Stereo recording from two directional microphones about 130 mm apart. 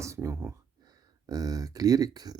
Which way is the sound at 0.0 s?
25° right (ahead or behind).